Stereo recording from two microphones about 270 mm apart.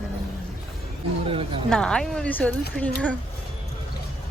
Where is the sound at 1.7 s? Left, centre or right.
Centre.